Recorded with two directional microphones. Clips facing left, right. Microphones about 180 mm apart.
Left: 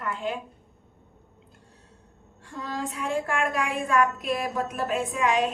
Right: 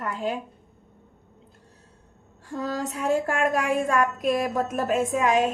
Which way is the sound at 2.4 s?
40° right (ahead or behind).